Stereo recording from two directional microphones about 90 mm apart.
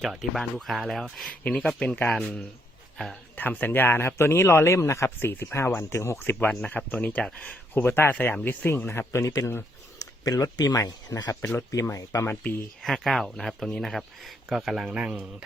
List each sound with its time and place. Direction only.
0.0 s speech: centre (ahead or behind)
1.5 s speech: 10° left (ahead or behind)
6.5 s speech: 10° left (ahead or behind); by 11.3 s 40° left (ahead or behind)
11.3 s speech: 25° left (ahead or behind)
12.3 s speech: 20° left (ahead or behind)
12.8 s speech: centre (ahead or behind)